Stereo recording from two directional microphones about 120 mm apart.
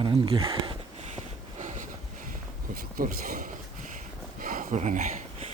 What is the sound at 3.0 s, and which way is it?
Speech, 90° right.